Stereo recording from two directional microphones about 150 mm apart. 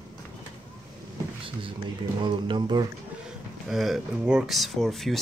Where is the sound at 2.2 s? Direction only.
35° right (ahead or behind).